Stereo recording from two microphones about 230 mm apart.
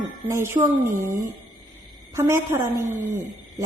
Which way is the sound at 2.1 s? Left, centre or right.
Centre.